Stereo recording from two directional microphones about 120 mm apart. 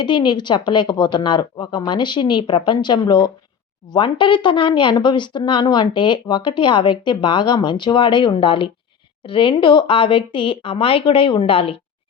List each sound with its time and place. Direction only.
0.0 s speech: 40° left (ahead or behind)